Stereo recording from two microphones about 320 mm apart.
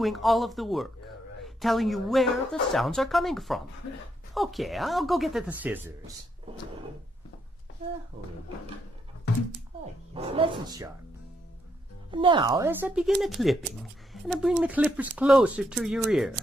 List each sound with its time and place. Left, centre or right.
0.0 s speech: centre
10.2 s speech: centre
12.1 s speech: centre